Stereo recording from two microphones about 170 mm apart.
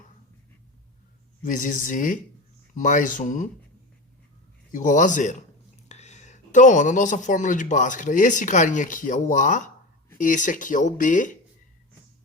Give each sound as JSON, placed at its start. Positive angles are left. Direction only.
{"t": 1.4, "sound": "a man's voice", "side_deg": 50}
{"t": 4.7, "sound": "a man's voice", "side_deg": 50}